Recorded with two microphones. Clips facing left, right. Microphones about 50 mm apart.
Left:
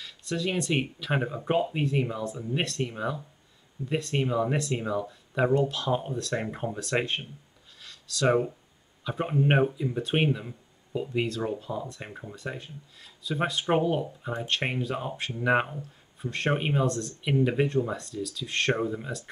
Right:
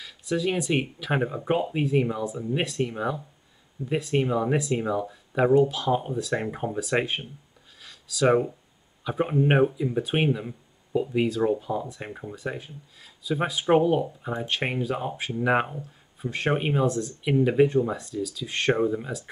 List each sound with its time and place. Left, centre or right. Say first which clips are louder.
0.0 s speech: right 4 dB; centre
7.8 s a sound: right 3 dB; centre
9.0 s speech: right 3 dB; centre